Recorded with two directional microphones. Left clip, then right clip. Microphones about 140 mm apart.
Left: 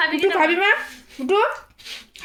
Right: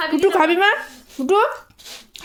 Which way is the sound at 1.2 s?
55° right (ahead or behind).